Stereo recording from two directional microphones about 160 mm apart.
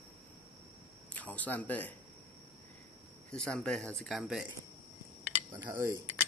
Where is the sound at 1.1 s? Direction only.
10° left (ahead or behind).